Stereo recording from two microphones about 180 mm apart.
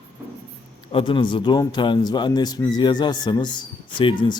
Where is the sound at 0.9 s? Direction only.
25° left (ahead or behind).